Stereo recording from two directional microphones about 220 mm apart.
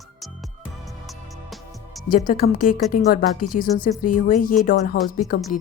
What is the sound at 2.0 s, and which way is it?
Speech, 40° left (ahead or behind).